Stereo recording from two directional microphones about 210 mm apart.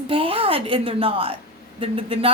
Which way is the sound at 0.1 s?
25° right (ahead or behind).